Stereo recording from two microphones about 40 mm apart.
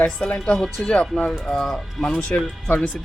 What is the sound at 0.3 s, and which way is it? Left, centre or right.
Speech, centre.